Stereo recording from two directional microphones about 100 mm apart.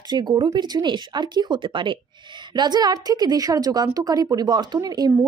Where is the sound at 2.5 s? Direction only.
45° right (ahead or behind).